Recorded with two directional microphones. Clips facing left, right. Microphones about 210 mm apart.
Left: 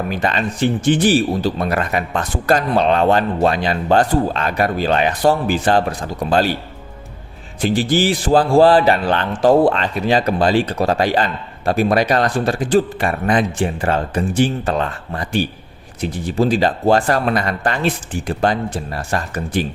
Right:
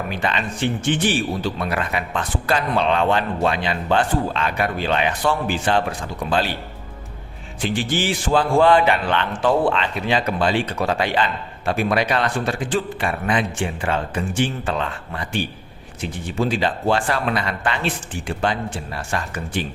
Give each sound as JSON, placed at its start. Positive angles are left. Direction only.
{"t": 0.1, "sound": "speech", "side_deg": 40}
{"t": 7.6, "sound": "speech", "side_deg": 40}